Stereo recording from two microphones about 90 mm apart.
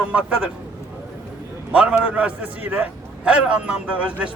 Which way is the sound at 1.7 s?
15° right (ahead or behind).